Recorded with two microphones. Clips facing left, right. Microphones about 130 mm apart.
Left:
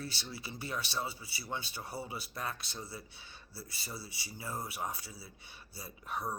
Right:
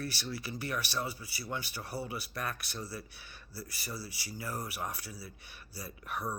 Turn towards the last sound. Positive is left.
turn(degrees=25)  # may be behind; listen again after turning